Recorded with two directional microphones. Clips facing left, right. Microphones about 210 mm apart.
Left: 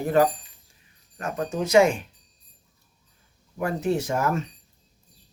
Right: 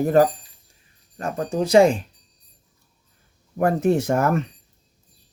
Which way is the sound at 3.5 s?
50° right (ahead or behind).